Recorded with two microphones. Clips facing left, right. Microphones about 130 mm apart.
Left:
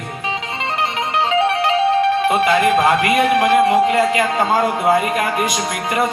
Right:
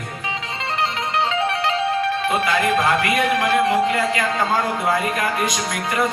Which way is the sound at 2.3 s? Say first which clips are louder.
Left 5 dB; 20° left (ahead or behind).